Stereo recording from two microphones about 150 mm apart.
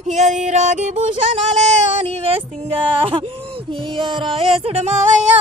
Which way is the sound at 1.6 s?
45° right (ahead or behind).